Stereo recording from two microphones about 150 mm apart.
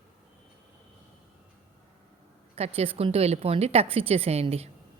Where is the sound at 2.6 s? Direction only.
40° right (ahead or behind).